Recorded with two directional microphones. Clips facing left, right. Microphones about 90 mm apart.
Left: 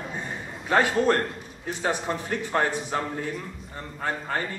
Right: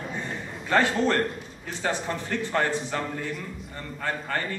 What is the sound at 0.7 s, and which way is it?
Speech, 15° left (ahead or behind).